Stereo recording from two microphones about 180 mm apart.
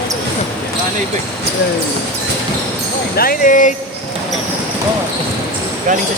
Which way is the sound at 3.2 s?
50° left (ahead or behind).